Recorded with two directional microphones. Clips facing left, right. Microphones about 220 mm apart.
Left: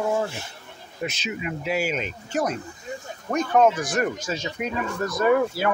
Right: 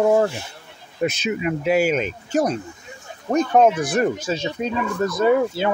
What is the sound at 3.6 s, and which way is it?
Speech, 60° right (ahead or behind).